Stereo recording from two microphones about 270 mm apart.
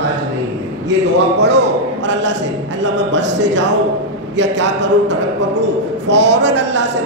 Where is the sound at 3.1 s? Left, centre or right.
Right.